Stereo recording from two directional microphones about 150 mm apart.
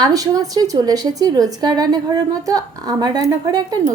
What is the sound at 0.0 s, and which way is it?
A woman's voice, 25° right (ahead or behind).